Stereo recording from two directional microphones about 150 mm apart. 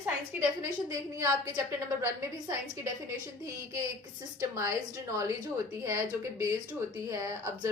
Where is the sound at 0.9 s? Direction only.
25° right (ahead or behind).